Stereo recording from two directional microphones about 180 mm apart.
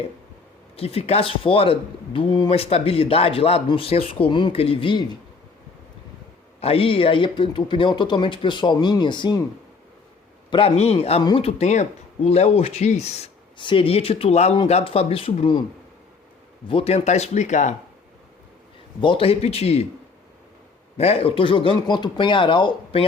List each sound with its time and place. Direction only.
0.8 s speech: 35° left (ahead or behind)
6.6 s speech: 30° left (ahead or behind)
10.5 s speech: 35° left (ahead or behind)
16.6 s speech: 30° left (ahead or behind)
18.9 s speech: 30° left (ahead or behind)
21.0 s speech: 35° left (ahead or behind)